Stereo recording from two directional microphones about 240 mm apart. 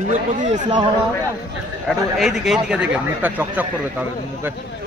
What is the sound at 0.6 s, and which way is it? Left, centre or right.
Speech, centre.